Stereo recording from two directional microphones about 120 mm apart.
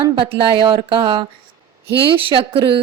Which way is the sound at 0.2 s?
45° right (ahead or behind).